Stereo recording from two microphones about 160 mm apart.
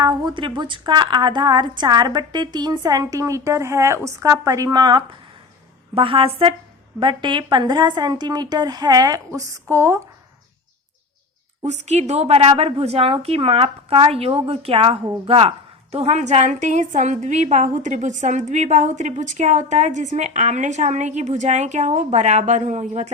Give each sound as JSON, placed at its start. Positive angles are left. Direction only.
{"t": 0.0, "sound": "a woman's voice", "side_deg": -30}
{"t": 11.6, "sound": "a woman's voice", "side_deg": -45}